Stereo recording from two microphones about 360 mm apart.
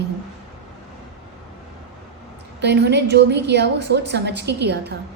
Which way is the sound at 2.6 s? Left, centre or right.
Right.